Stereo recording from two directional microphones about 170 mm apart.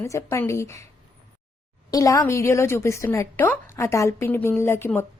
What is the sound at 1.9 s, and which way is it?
Speech, 20° left (ahead or behind).